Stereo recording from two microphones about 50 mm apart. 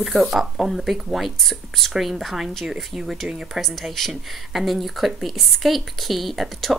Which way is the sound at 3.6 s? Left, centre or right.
Centre.